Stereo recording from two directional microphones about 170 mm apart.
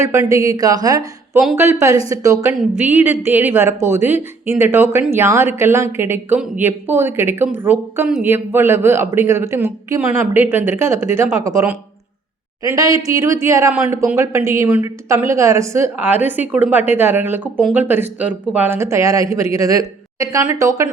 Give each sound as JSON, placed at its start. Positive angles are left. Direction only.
{"t": 0.0, "sound": "a woman's voice", "side_deg": -15}